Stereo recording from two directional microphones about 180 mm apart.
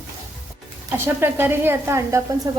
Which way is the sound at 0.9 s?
15° right (ahead or behind).